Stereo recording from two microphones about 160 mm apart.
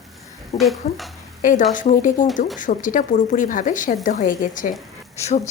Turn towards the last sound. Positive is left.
turn(degrees=45)  # may be behind; listen again after turning